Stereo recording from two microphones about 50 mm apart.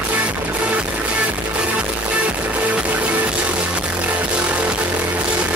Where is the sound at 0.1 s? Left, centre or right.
Right.